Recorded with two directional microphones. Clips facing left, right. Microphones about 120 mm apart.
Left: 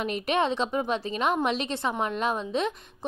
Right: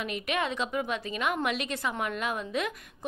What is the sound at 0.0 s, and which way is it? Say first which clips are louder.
A woman's voice: left 5 dB; 35° left (ahead or behind).